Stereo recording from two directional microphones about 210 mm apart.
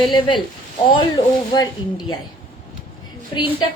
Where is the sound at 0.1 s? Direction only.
20° left (ahead or behind).